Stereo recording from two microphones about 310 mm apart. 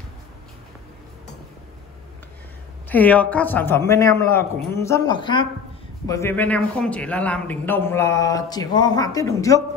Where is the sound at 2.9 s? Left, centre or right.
Centre.